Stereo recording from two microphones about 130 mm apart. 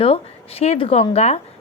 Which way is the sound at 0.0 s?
50° left (ahead or behind).